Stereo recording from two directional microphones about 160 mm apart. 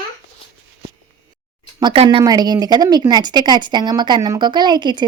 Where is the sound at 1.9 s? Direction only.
40° right (ahead or behind).